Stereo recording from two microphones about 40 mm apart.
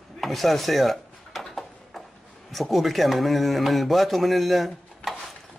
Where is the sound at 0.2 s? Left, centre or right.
Centre.